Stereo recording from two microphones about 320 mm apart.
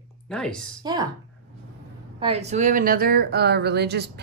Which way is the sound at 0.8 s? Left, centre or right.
Centre.